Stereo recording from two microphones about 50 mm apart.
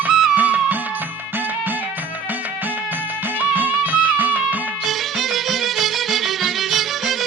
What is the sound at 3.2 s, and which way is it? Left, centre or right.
Music, right.